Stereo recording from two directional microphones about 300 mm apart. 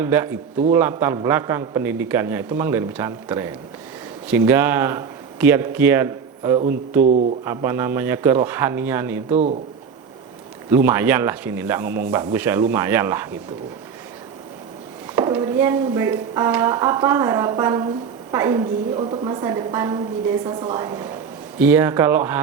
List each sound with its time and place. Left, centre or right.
0.0 s speech: centre
9.3 s speech: right
10.7 s speech: centre
15.1 s speech: centre